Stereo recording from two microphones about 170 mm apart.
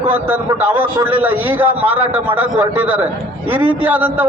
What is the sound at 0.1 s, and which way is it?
A man's voice, 10° right (ahead or behind).